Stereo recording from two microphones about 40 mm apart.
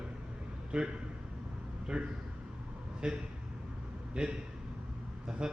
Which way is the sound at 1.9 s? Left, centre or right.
Right.